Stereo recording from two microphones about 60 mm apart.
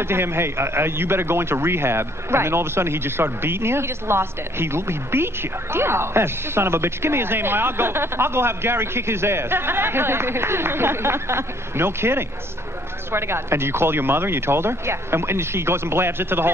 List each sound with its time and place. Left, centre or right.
0.0 s a man's voice: right